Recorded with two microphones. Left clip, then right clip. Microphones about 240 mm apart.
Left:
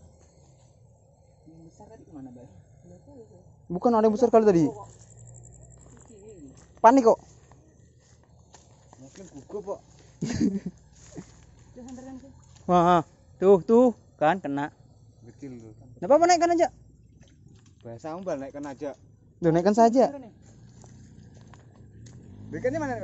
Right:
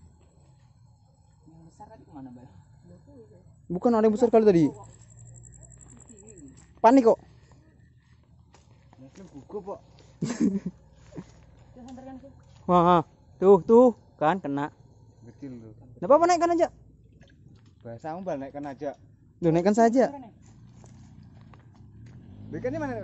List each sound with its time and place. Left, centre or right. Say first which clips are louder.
3.6 s a woman's voice: left 1 dB; centre
6.8 s a woman's voice: left 1 dB; centre
9.1 s snake: left 1 dB; centre
10.2 s a woman's voice: even; centre
11.2 s a sound: right 1 dB; centre
12.6 s speech: even; centre
15.2 s a man's voice: even; right
17.8 s speech: even; right
19.4 s a woman's voice: left 1 dB; centre
22.5 s a woman's voice: left 3 dB; centre